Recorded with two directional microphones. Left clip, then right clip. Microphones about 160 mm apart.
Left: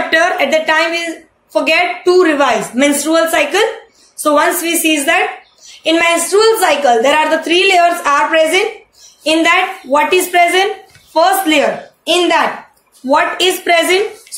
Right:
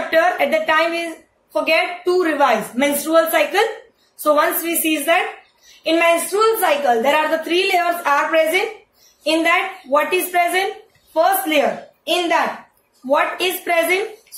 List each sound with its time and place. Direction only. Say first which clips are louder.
0.1 s a woman's voice: left 3 dB; 30° left (ahead or behind)